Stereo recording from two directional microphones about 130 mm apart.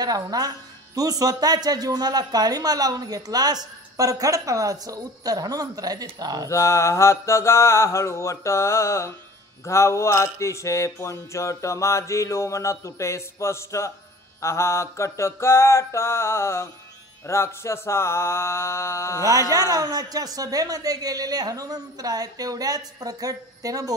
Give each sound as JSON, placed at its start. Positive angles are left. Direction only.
{"t": 0.0, "sound": "speech", "side_deg": -30}
{"t": 6.5, "sound": "a sound", "side_deg": 20}
{"t": 19.7, "sound": "speech", "side_deg": -30}